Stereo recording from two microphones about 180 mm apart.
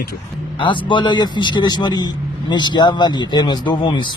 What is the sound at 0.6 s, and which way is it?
Speech, 25° left (ahead or behind).